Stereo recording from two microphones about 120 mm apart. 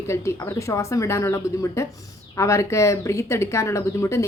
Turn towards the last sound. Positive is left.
turn(degrees=25)  # may be behind; listen again after turning